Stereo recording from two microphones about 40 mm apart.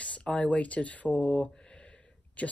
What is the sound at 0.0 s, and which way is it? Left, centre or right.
Speech, left.